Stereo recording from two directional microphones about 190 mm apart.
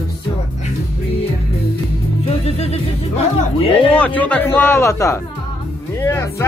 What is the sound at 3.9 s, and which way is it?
Speech, 5° left (ahead or behind).